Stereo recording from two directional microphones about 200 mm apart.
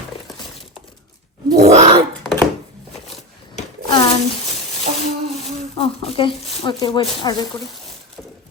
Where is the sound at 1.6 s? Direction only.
35° right (ahead or behind).